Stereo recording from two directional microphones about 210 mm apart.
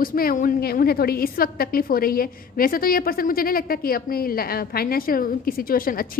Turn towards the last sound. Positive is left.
turn(degrees=45)  # may be behind; listen again after turning